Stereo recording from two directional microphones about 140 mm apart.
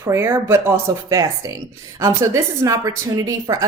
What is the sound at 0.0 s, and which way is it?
Speech, 20° right (ahead or behind).